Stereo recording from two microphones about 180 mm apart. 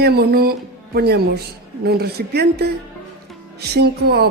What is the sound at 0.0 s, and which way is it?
Music, 60° right (ahead or behind).